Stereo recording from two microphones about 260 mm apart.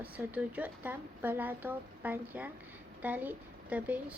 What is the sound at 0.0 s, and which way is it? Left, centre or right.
A woman's voice, centre.